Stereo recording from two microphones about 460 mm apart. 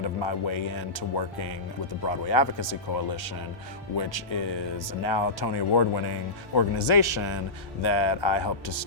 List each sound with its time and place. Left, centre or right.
0.0 s speech: left
7.8 s speech: left